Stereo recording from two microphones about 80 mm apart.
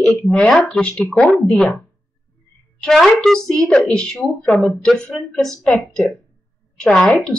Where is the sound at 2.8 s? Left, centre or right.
Centre.